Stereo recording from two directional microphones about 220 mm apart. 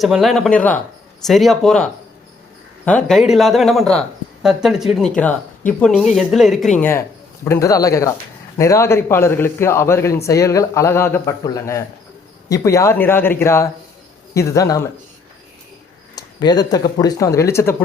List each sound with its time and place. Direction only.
0.0 s a man's voice: centre (ahead or behind); by 14.8 s 15° left (ahead or behind)
16.1 s a man's voice: 20° left (ahead or behind)